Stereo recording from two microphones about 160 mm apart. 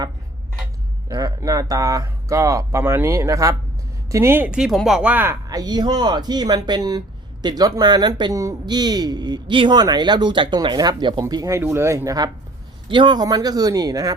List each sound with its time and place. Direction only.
1.0 s speech: 20° right (ahead or behind)